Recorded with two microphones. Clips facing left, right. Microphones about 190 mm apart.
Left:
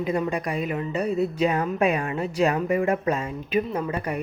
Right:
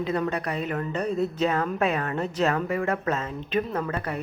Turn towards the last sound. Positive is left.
turn(degrees=10)  # may be behind; listen again after turning